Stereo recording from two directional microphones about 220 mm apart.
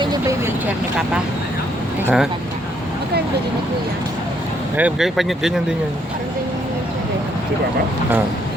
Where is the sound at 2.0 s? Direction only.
Centre (ahead or behind).